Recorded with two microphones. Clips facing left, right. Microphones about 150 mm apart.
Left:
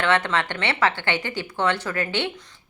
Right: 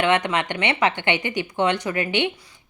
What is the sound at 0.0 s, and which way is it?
A woman's voice, 15° right (ahead or behind).